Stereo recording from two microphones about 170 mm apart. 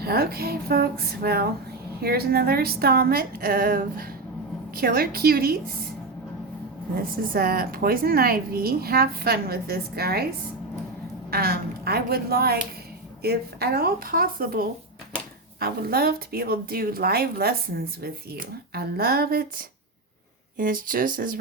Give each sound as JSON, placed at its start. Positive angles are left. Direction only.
{"t": 0.0, "sound": "speech", "side_deg": -65}
{"t": 6.9, "sound": "speech", "side_deg": -60}
{"t": 11.3, "sound": "speech", "side_deg": -60}